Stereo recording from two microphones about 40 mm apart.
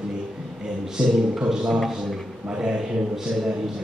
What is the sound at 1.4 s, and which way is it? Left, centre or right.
A man's voice, centre.